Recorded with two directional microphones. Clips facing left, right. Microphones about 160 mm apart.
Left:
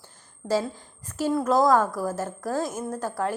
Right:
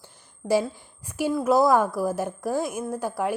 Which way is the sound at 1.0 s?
15° right (ahead or behind).